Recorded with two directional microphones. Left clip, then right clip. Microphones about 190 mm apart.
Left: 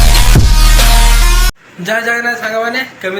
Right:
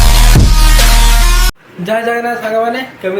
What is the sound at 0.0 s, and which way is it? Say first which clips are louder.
Music: even; centre (ahead or behind).